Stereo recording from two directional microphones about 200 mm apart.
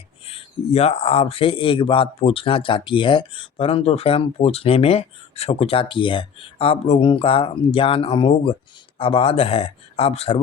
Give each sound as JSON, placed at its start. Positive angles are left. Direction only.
{"t": 0.3, "sound": "speech", "side_deg": 30}